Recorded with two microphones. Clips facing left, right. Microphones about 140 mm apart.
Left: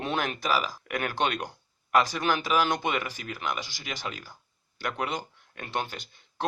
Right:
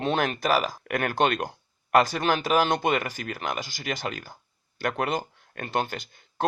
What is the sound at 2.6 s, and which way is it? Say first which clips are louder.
Speech: right 4 dB; 40° right (ahead or behind).